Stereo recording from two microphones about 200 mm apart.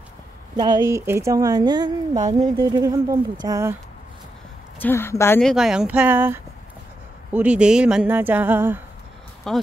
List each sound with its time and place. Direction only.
0.6 s a woman's voice: 20° right (ahead or behind)
4.7 s speech: 10° left (ahead or behind)
5.4 s a woman's voice: centre (ahead or behind)
9.5 s speech: centre (ahead or behind)